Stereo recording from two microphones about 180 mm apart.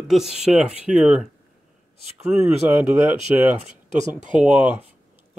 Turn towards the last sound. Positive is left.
turn(degrees=-10)  # may be behind; listen again after turning